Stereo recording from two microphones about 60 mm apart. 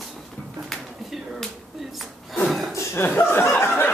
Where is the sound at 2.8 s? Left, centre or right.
Left.